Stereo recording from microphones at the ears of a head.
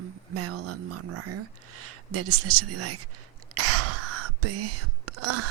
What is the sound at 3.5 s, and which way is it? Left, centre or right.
Whispering, right.